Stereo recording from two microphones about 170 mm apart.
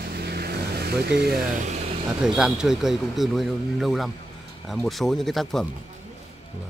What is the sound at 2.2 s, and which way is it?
Speech, 5° right (ahead or behind).